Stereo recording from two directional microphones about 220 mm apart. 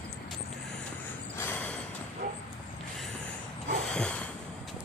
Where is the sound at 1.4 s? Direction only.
10° left (ahead or behind).